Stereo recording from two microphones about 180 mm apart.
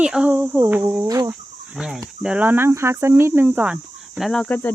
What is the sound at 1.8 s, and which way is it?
Speech, centre (ahead or behind).